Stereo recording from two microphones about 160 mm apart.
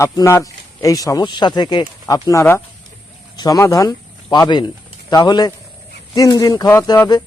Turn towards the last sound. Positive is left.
turn(degrees=25)  # may be behind; listen again after turning